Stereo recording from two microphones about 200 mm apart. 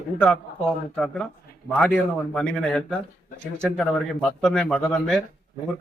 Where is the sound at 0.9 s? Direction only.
5° left (ahead or behind).